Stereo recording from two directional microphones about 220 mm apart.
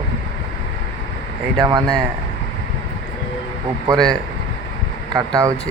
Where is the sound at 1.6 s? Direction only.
20° right (ahead or behind).